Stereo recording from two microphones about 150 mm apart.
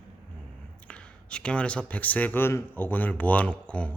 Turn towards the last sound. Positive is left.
turn(degrees=10)  # may be behind; listen again after turning